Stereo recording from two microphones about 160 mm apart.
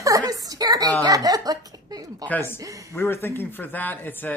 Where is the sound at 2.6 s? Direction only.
20° right (ahead or behind).